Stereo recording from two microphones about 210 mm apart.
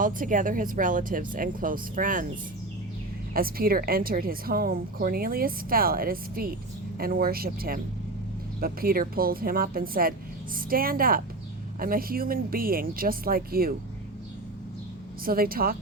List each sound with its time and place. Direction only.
0.0 s speech: 40° right (ahead or behind)
3.3 s a woman's voice: 45° right (ahead or behind)
15.2 s a woman's voice: 45° right (ahead or behind)